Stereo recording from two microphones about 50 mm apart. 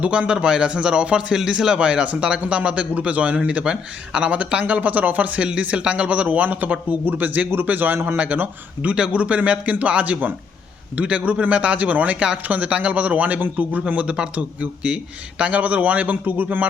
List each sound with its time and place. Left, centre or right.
0.0 s speech: right
8.0 s speech: right
13.4 s speech: right
13.8 s speech: right